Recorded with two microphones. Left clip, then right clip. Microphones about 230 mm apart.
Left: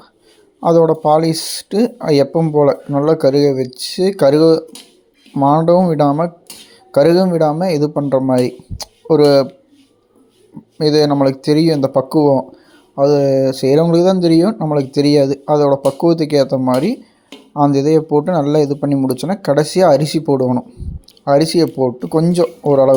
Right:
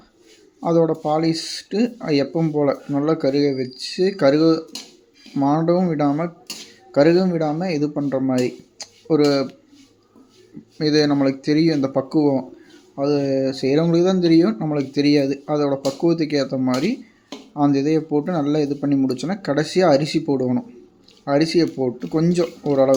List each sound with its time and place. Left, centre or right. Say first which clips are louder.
0.6 s speech: left 7 dB; centre
10.8 s speech: left 6 dB; centre